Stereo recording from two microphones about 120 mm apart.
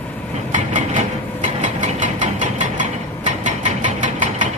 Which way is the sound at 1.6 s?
90° right.